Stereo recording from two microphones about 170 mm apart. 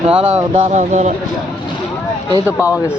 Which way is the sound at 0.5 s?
45° right (ahead or behind).